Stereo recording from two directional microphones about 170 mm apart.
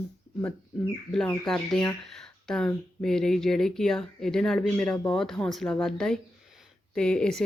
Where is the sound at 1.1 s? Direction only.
5° left (ahead or behind).